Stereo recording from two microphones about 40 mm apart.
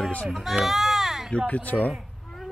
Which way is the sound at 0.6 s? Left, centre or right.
Centre.